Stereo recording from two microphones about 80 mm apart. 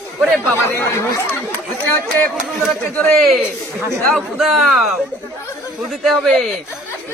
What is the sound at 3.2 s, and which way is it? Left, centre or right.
Speech, centre.